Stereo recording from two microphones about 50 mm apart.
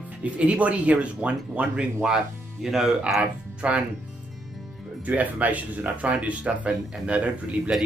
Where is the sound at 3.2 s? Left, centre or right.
Right.